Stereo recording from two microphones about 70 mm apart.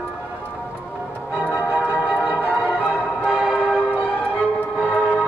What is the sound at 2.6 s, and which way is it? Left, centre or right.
Music, centre.